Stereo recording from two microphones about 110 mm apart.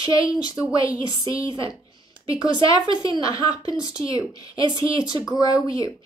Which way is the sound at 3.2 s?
35° left (ahead or behind).